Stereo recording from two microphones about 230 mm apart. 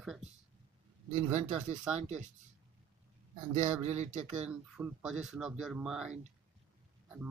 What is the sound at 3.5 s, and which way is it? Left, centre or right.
Speech, right.